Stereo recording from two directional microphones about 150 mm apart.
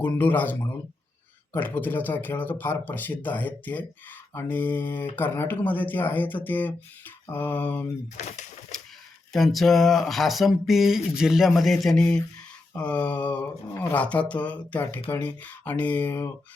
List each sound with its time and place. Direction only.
0.0 s speech: 10° left (ahead or behind)
9.3 s speech: centre (ahead or behind)